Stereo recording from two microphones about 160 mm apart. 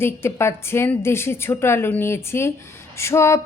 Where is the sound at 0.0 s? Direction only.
15° left (ahead or behind).